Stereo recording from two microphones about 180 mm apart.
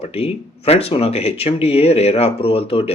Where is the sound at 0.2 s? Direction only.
35° left (ahead or behind).